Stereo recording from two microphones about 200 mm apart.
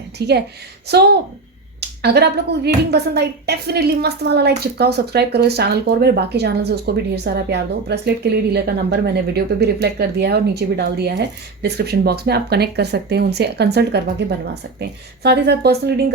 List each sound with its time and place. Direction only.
0.2 s speech: 55° right (ahead or behind)